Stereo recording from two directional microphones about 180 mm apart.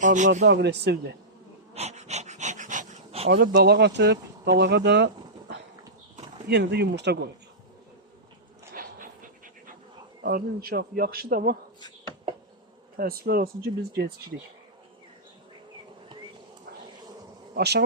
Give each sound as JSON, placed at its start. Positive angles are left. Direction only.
{"t": 0.0, "sound": "speech", "side_deg": -45}
{"t": 0.4, "sound": "speech", "side_deg": -75}
{"t": 1.7, "sound": "dog", "side_deg": -40}
{"t": 3.2, "sound": "speech", "side_deg": -80}
{"t": 8.7, "sound": "dog", "side_deg": -50}
{"t": 10.2, "sound": "speech", "side_deg": -55}
{"t": 13.0, "sound": "speech", "side_deg": -55}
{"t": 17.5, "sound": "speech", "side_deg": -65}